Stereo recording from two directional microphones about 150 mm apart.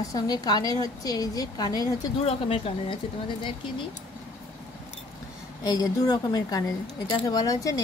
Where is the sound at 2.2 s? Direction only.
40° left (ahead or behind).